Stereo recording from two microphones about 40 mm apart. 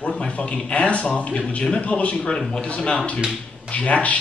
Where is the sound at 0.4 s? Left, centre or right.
Left.